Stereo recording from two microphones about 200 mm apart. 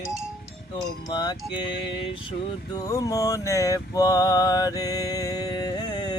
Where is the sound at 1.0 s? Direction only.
20° left (ahead or behind).